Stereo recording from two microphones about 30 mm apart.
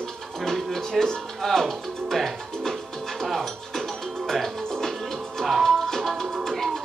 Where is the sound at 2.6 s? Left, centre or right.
Centre.